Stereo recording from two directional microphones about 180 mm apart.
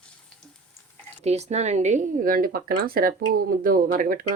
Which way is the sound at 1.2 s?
35° right (ahead or behind).